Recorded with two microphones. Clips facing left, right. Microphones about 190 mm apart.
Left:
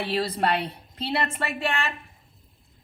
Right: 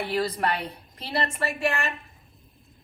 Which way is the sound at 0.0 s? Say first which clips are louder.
Left 1 dB; 30° left (ahead or behind).